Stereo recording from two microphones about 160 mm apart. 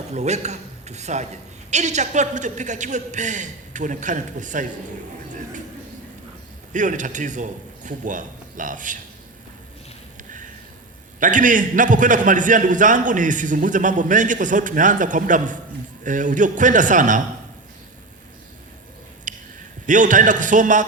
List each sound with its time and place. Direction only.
0.1 s a man's voice: 45° right (ahead or behind)
6.7 s a man's voice: 50° right (ahead or behind)
10.2 s a sound: 55° right (ahead or behind)
11.2 s a man's voice: 55° right (ahead or behind)
19.3 s a sound: 55° right (ahead or behind)
19.9 s a man's voice: 55° right (ahead or behind)